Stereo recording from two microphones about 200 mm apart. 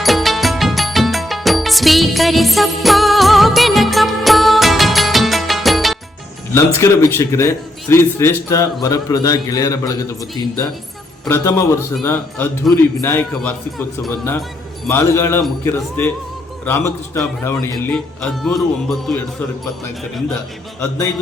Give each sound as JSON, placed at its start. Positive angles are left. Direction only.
{"t": 0.0, "sound": "music", "side_deg": 0}
{"t": 6.5, "sound": "a man's voice", "side_deg": 15}
{"t": 11.3, "sound": "a man's voice", "side_deg": 15}
{"t": 13.0, "sound": "a man's voice", "side_deg": 10}